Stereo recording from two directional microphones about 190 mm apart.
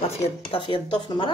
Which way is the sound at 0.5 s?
25° left (ahead or behind).